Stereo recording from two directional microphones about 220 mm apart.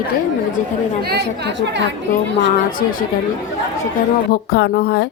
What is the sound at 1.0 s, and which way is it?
Speech, 45° right (ahead or behind).